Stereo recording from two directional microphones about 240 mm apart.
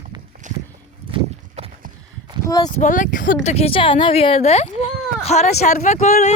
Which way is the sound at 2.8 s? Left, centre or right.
Left.